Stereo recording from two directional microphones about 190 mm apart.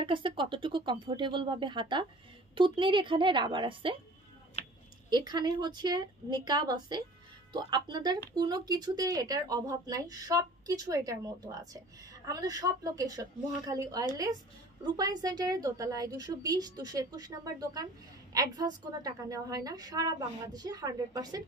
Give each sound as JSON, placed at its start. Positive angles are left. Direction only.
{"t": 0.0, "sound": "a woman's voice", "side_deg": -25}
{"t": 5.1, "sound": "a woman's voice", "side_deg": -20}